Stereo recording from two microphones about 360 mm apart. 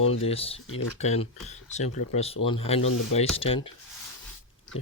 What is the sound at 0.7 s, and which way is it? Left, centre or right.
Speech, left.